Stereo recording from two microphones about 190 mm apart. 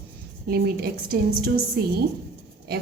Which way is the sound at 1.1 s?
50° right (ahead or behind).